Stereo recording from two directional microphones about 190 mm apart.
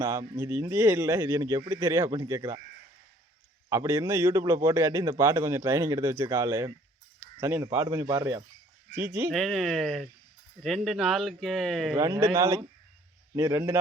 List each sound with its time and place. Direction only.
0.0 s a man's voice: 15° right (ahead or behind)
3.7 s a man's voice: 15° right (ahead or behind)
9.3 s speech: centre (ahead or behind)
11.9 s a man's voice: 15° right (ahead or behind)